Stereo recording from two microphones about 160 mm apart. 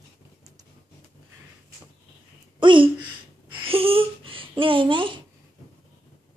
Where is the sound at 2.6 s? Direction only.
30° right (ahead or behind).